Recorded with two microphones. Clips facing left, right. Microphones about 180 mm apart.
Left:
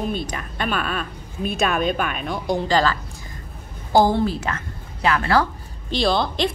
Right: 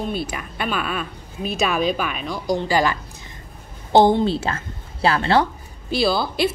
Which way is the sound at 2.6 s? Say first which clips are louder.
Even; 15° right (ahead or behind).